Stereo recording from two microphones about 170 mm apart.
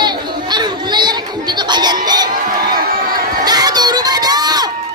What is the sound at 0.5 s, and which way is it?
Crowd, 25° right (ahead or behind).